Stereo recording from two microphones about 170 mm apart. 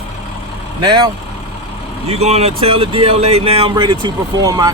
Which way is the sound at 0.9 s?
25° right (ahead or behind).